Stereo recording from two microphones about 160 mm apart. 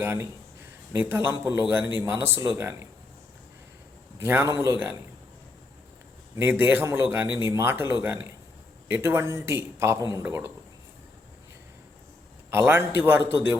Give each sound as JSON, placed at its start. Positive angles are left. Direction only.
{"t": 0.0, "sound": "a man's voice", "side_deg": -15}
{"t": 4.2, "sound": "a man's voice", "side_deg": -15}
{"t": 6.3, "sound": "a man's voice", "side_deg": -15}
{"t": 12.5, "sound": "a man's voice", "side_deg": -15}